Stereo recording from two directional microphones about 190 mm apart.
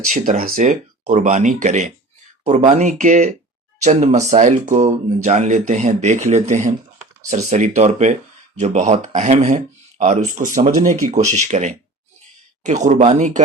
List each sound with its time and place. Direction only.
0.1 s speech: 45° right (ahead or behind)